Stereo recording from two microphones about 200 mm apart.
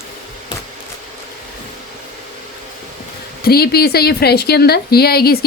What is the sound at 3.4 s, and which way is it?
Speech, 50° left (ahead or behind).